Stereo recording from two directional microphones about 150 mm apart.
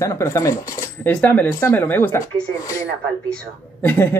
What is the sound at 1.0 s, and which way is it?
Speech, 10° left (ahead or behind).